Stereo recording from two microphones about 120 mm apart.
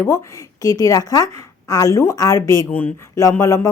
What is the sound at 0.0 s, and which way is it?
A woman's voice, 25° left (ahead or behind).